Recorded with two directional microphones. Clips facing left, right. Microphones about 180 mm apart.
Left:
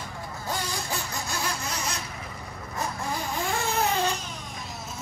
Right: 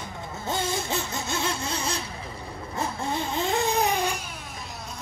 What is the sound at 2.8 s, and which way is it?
Baby cry, 25° right (ahead or behind).